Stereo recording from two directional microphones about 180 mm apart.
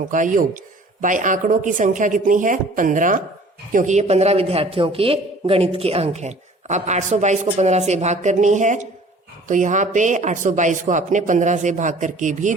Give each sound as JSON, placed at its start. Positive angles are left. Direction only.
{"t": 0.1, "sound": "a woman's voice", "side_deg": -45}